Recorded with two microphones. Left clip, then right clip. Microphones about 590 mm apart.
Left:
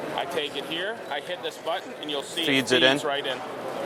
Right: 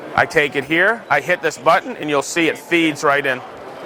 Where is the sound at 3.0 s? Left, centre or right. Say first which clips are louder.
Right 11 dB; right.